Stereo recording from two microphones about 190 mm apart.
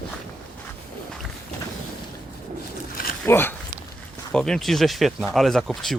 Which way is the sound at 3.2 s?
10° left (ahead or behind).